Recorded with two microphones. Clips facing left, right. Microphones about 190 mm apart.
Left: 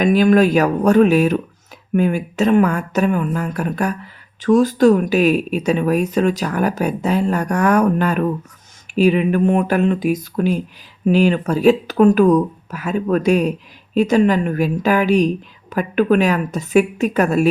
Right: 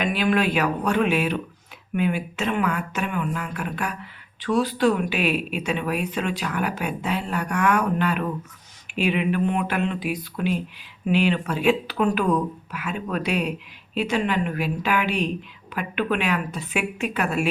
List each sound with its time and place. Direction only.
0.0 s speech: 40° left (ahead or behind)